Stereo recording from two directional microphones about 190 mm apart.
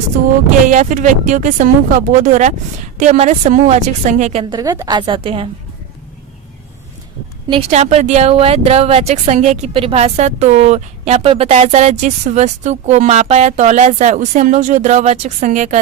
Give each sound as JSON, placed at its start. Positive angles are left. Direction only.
{"t": 0.7, "sound": "speech", "side_deg": -40}
{"t": 7.4, "sound": "speech", "side_deg": -30}